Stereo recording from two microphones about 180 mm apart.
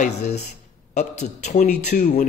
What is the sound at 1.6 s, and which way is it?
Speech, 60° left (ahead or behind).